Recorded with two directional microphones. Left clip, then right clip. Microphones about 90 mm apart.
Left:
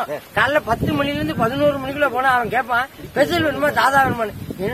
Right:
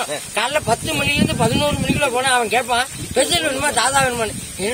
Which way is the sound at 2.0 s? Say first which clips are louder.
Left 1 dB; 35° left (ahead or behind).